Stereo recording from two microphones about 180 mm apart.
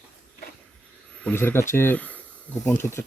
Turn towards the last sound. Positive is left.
turn(degrees=15)  # may be behind; listen again after turning